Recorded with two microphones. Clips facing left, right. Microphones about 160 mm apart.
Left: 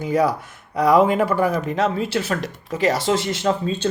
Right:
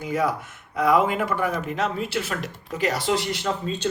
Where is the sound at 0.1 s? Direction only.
30° left (ahead or behind).